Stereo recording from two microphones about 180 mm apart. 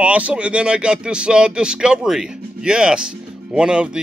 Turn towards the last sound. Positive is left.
turn(degrees=-5)  # may be behind; listen again after turning